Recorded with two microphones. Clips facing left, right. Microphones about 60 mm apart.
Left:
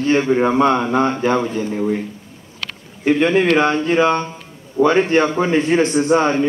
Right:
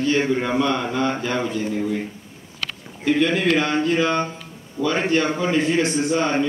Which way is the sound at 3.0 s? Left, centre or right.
Left.